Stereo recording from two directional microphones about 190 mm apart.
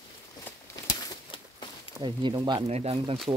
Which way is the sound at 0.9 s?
20° left (ahead or behind).